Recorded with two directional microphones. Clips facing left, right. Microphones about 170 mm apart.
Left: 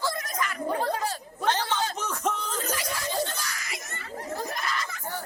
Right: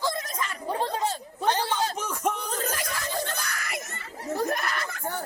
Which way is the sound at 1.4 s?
10° right (ahead or behind).